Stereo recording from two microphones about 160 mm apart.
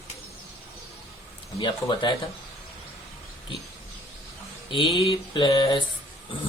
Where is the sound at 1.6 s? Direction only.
30° left (ahead or behind).